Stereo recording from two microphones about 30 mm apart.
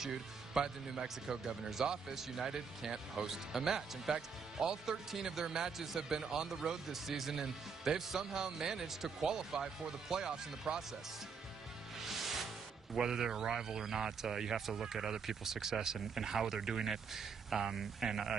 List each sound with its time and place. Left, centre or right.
0.0 s speech: centre
12.1 s music: centre
12.9 s speech: right